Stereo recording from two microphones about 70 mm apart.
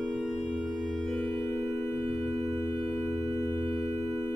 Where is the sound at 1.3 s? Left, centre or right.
Left.